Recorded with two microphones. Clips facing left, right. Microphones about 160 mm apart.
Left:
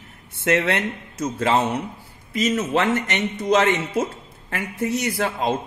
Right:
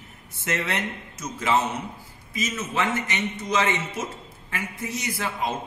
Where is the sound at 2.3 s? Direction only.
65° left (ahead or behind).